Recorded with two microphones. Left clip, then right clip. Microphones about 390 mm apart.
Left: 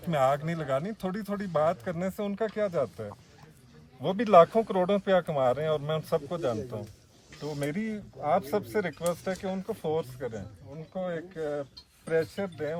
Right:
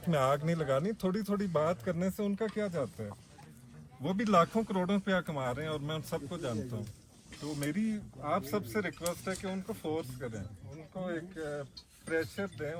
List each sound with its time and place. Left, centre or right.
0.1 s speech: centre
4.0 s speech: centre